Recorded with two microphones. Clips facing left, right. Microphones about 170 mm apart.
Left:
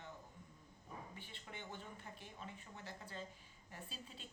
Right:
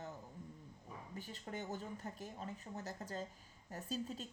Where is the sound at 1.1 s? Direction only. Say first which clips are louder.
Right 8 dB; 40° right (ahead or behind).